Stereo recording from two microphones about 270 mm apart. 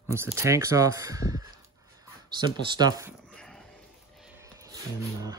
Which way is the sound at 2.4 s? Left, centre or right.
Centre.